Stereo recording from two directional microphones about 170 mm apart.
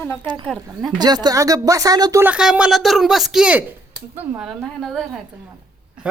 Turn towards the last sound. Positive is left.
turn(degrees=0)  # may be behind; listen again after turning